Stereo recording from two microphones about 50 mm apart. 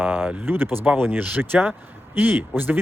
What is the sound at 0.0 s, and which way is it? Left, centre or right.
Speech, right.